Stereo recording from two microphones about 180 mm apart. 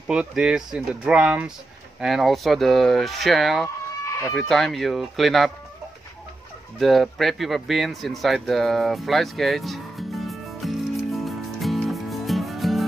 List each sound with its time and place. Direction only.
0.0 s speech: 5° right (ahead or behind)
3.6 s chicken: 15° left (ahead or behind)
4.4 s speech: centre (ahead or behind)
6.8 s a sound: centre (ahead or behind)